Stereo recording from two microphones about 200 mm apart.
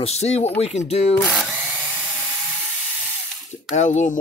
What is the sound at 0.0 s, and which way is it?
Speech, 30° left (ahead or behind).